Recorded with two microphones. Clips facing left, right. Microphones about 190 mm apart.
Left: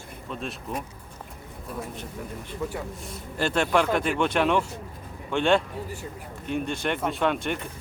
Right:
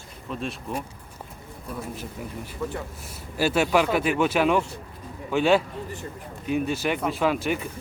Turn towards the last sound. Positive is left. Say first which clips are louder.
# right 2 dB
turn(degrees=-5)  # may be behind; listen again after turning